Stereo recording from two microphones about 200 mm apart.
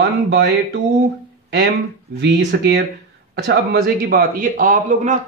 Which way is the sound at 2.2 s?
55° right (ahead or behind).